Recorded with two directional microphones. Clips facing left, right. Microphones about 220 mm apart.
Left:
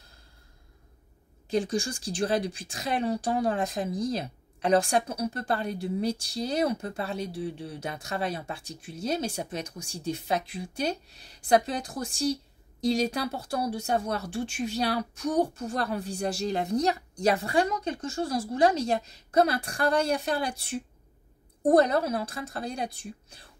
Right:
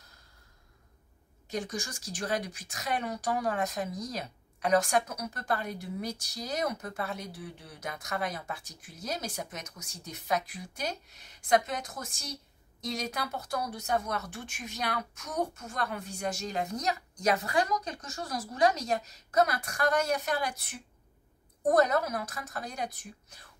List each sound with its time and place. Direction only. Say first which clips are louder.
1.5 s a woman's voice: left 8 dB; 30° left (ahead or behind)